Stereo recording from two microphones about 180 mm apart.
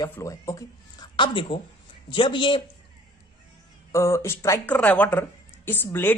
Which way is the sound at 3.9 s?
15° left (ahead or behind).